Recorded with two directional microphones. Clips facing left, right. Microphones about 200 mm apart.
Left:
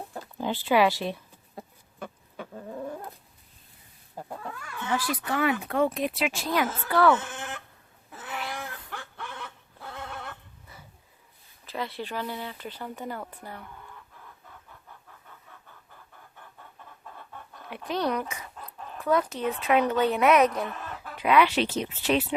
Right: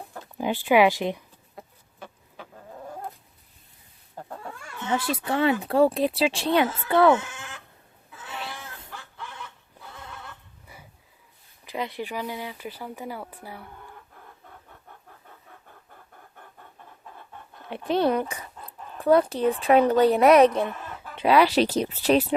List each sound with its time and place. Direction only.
0.3 s speech: 15° right (ahead or behind)
4.2 s wild animals: 10° left (ahead or behind)
4.5 s speech: 25° right (ahead or behind)
7.3 s sheep: 55° left (ahead or behind)
8.3 s a sound: 25° right (ahead or behind)
8.5 s a sound: 60° left (ahead or behind)
10.0 s neigh: 65° left (ahead or behind)
11.6 s speech: 15° right (ahead or behind)
17.7 s a woman's voice: 30° right (ahead or behind)